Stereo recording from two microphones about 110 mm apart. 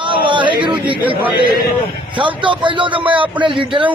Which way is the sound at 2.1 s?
50° right (ahead or behind).